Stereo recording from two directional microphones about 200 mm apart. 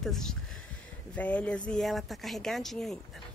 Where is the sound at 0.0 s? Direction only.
Centre (ahead or behind).